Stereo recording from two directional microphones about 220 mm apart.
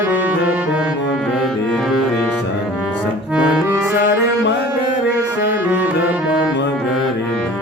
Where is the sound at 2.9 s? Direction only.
5° right (ahead or behind).